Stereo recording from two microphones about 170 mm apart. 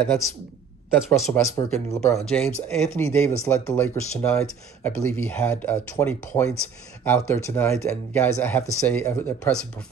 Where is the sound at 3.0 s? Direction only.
15° left (ahead or behind).